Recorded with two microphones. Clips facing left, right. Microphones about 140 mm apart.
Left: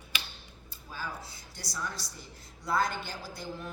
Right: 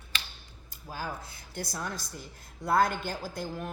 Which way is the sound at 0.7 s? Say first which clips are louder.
Right 4 dB; 40° right (ahead or behind).